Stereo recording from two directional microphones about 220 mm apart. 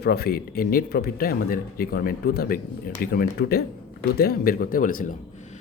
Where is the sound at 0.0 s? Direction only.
45° left (ahead or behind).